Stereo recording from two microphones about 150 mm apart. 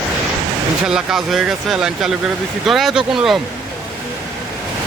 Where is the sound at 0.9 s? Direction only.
5° right (ahead or behind).